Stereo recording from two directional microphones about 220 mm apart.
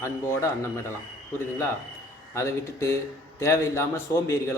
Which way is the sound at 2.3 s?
10° left (ahead or behind).